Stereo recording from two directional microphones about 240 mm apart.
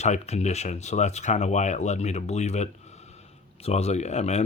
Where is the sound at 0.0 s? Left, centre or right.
Left.